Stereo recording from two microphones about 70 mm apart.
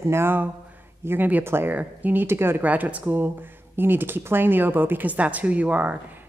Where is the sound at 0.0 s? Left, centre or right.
Right.